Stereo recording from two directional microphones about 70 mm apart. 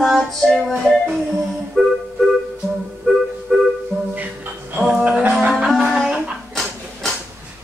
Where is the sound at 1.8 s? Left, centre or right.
Centre.